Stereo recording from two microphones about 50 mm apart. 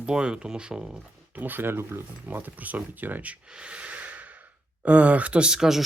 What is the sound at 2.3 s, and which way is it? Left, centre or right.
Speech, right.